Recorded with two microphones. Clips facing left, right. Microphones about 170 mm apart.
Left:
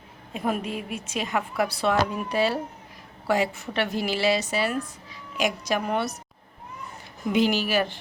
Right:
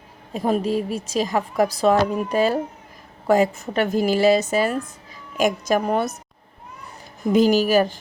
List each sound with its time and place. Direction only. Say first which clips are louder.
0.3 s a woman's voice: right 7 dB; 35° right (ahead or behind)
7.3 s a woman's voice: right 6 dB; 40° right (ahead or behind)